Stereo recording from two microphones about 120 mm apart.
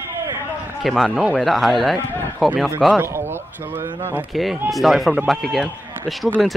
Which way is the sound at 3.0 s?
20° right (ahead or behind).